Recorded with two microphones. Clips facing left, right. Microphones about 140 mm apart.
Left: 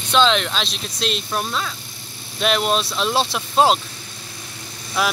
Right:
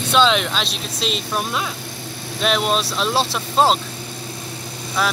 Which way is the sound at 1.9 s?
80° right.